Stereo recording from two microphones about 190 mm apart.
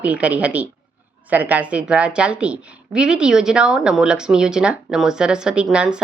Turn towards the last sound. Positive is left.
turn(degrees=-5)  # may be behind; listen again after turning